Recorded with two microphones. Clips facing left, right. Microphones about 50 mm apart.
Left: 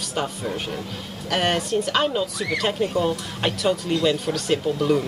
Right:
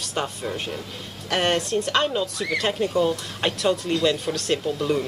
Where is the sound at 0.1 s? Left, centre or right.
Centre.